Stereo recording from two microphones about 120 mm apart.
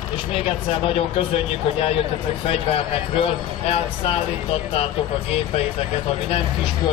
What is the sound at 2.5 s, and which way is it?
Speech, 55° left (ahead or behind).